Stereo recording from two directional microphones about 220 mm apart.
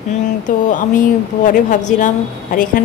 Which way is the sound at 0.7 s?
35° left (ahead or behind).